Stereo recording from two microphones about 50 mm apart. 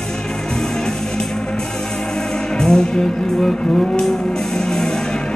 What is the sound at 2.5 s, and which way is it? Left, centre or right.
Music, centre.